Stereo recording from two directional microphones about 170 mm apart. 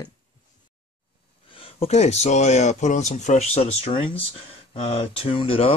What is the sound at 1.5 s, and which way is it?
Speech, 35° left (ahead or behind).